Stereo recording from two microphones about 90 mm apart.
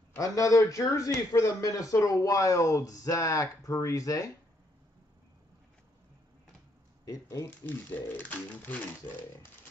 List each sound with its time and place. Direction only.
0.1 s a man's voice: 40° left (ahead or behind)
7.1 s a man's voice: 40° left (ahead or behind)
7.4 s speech: 20° left (ahead or behind)